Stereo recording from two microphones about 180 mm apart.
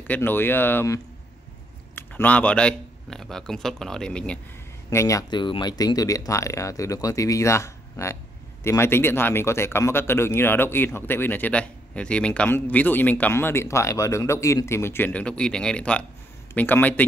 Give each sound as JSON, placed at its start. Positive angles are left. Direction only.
{"t": 0.0, "sound": "speech", "side_deg": 10}
{"t": 4.8, "sound": "speech", "side_deg": 15}